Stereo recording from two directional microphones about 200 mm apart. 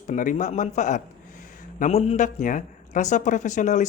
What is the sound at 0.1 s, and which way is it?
A woman's voice, 40° left (ahead or behind).